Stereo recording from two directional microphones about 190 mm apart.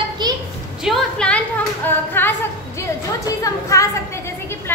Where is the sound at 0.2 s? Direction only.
20° right (ahead or behind).